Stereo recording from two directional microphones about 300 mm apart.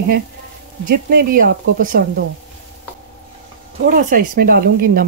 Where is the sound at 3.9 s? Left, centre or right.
Right.